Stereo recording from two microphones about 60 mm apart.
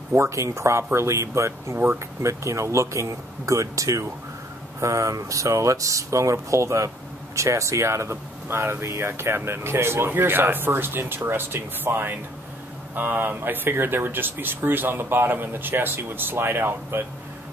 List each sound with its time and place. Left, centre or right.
0.1 s speech: right